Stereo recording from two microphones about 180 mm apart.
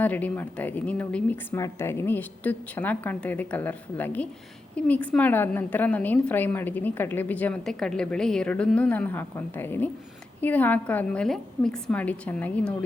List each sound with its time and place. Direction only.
0.0 s a woman's voice: 10° left (ahead or behind)